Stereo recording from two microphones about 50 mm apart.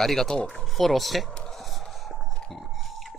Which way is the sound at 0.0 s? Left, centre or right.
Centre.